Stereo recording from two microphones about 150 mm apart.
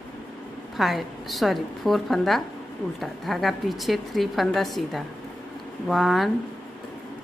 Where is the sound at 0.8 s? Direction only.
Centre (ahead or behind).